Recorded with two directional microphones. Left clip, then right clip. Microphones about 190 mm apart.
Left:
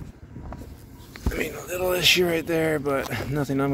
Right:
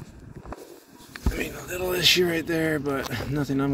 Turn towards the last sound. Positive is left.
turn(degrees=20)  # may be behind; listen again after turning